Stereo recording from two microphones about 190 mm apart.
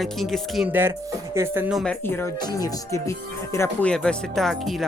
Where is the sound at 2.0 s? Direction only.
10° left (ahead or behind).